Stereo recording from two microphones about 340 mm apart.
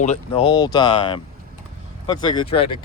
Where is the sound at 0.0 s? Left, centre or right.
Centre.